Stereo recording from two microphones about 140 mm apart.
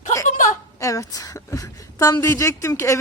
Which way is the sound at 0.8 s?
25° left (ahead or behind).